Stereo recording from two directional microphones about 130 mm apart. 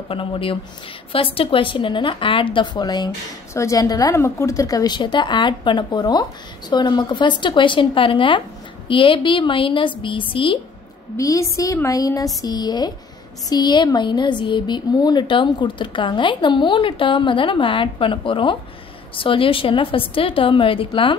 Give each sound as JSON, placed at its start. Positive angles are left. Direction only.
{"t": 0.1, "sound": "a woman's voice", "side_deg": 45}
{"t": 11.1, "sound": "a woman's voice", "side_deg": 25}